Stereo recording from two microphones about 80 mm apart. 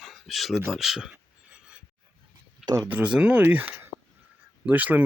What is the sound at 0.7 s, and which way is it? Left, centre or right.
Speech, centre.